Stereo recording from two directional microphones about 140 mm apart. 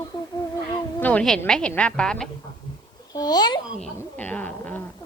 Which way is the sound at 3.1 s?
25° left (ahead or behind).